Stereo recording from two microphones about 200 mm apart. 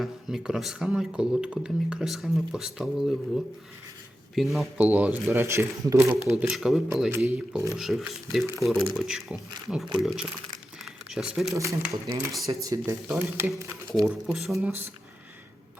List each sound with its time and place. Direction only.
0.0 s speech: centre (ahead or behind)
4.5 s speech: 5° right (ahead or behind)
6.3 s speech: 5° right (ahead or behind)
10.8 s a sound: centre (ahead or behind)
11.5 s speech: 15° right (ahead or behind)
14.0 s speech: centre (ahead or behind)